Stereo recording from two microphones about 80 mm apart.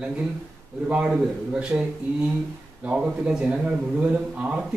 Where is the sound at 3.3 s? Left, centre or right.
Centre.